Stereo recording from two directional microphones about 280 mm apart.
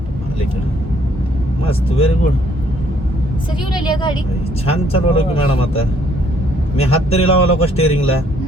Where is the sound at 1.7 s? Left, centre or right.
Left.